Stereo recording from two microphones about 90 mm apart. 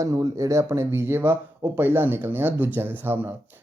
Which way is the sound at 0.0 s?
40° right (ahead or behind).